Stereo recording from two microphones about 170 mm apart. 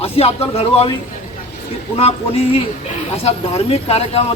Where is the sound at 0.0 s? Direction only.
35° left (ahead or behind).